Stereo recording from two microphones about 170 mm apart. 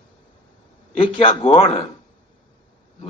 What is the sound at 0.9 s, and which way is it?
Speech, 35° left (ahead or behind).